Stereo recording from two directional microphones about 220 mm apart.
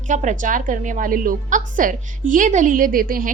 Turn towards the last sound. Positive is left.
turn(degrees=-40)  # may be behind; listen again after turning